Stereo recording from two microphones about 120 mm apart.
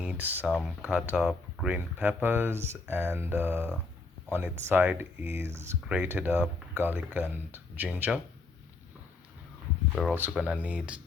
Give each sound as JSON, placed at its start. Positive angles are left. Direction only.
{"t": 0.0, "sound": "speech", "side_deg": -10}
{"t": 10.1, "sound": "speech", "side_deg": -20}